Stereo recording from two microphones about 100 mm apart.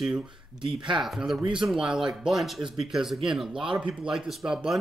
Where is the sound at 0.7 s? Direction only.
50° right (ahead or behind).